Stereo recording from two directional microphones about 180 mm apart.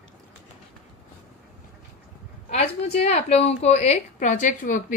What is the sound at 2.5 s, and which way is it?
A woman's voice, 35° left (ahead or behind).